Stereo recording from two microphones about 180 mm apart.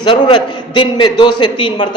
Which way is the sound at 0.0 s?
25° left (ahead or behind).